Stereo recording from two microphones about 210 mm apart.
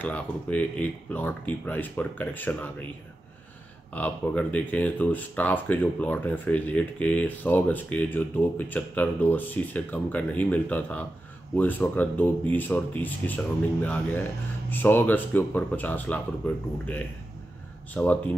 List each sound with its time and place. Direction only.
0.0 s speech: 5° left (ahead or behind)
3.9 s speech: 5° left (ahead or behind)